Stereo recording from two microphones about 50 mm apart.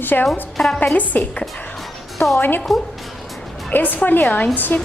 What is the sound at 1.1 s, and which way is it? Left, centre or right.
Speech, left.